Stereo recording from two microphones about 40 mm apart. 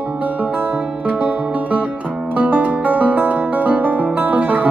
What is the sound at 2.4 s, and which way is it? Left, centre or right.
Music, right.